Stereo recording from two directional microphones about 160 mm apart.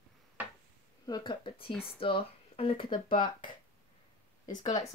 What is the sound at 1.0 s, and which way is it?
Speech, 30° left (ahead or behind).